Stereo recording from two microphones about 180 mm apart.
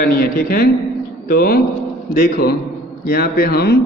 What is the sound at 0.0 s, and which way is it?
A man's voice, 55° left (ahead or behind).